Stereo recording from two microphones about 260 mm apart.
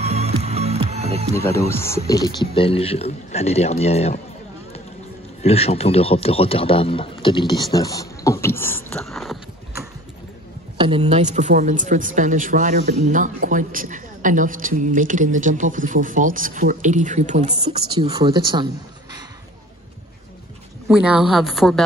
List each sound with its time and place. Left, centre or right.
0.0 s music: right
1.7 s a man's voice: centre
5.4 s a man's voice: left; by 9.4 s centre
10.8 s speech: right
17.9 s speech: centre
20.9 s a woman's voice: centre